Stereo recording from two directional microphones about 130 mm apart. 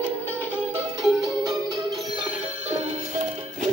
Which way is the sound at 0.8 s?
25° right (ahead or behind).